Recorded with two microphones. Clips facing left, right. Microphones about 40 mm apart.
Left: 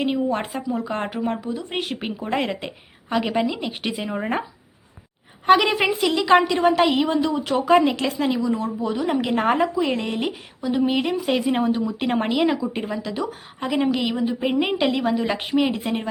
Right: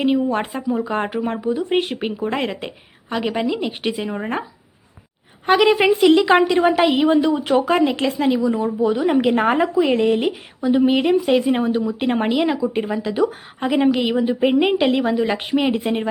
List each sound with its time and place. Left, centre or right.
0.0 s speech: centre
5.5 s speech: centre; by 7.7 s right
7.7 s speech: centre